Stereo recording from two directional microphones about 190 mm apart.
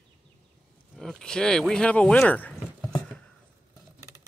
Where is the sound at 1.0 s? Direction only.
Centre (ahead or behind).